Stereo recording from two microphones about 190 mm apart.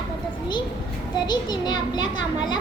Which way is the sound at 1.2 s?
20° left (ahead or behind).